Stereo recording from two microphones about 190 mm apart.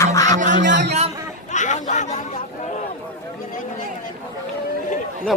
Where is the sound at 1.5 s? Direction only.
40° left (ahead or behind).